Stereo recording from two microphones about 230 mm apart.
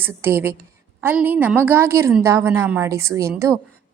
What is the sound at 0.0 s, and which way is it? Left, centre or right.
A woman's voice, centre.